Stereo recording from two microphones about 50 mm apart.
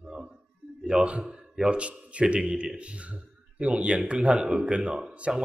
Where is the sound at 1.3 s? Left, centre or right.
Centre.